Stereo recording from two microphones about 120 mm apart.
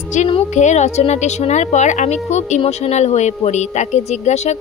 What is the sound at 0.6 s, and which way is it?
Speech, 75° left (ahead or behind).